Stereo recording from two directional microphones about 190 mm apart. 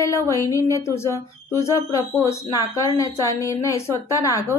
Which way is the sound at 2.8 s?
20° left (ahead or behind).